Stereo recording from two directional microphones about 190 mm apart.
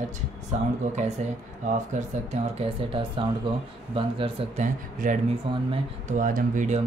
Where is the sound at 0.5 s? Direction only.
40° right (ahead or behind).